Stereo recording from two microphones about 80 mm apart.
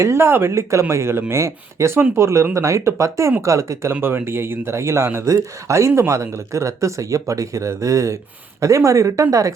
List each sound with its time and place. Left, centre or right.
0.0 s speech: right
4.0 s speech: right